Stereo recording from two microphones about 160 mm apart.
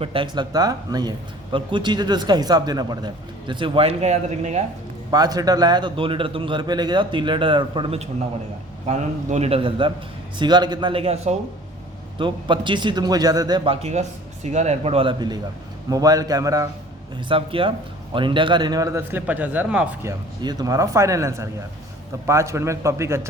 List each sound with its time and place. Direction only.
0.0 s speech: 35° right (ahead or behind)
5.1 s a man's voice: 25° right (ahead or behind)
13.7 s a man's voice: 40° right (ahead or behind); by 16.6 s 20° right (ahead or behind)
17.2 s speech: 35° right (ahead or behind); by 20.1 s 10° right (ahead or behind)
20.4 s a man's voice: 25° right (ahead or behind)